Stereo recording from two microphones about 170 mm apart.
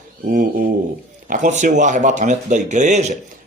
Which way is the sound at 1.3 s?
45° right (ahead or behind).